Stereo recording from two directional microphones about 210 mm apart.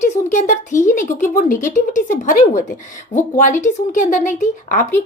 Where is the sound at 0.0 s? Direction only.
35° left (ahead or behind).